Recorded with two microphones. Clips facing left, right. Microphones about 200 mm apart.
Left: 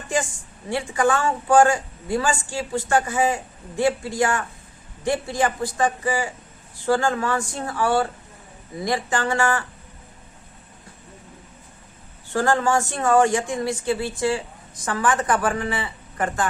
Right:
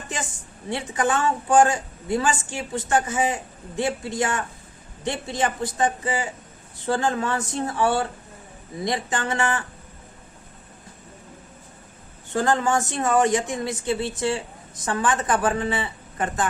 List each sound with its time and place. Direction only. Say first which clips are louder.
0.7 s a man's voice: left 3 dB; 20° right (ahead or behind)
12.3 s a man's voice: left 1 dB; 20° right (ahead or behind)